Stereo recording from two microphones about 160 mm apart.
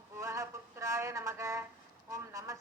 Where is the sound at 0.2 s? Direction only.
20° right (ahead or behind).